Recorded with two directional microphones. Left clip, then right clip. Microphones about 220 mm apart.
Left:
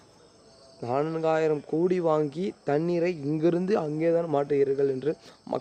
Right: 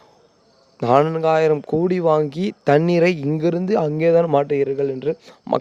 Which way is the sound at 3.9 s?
40° right (ahead or behind).